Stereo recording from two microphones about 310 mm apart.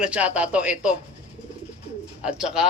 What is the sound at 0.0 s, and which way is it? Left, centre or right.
Speech, centre.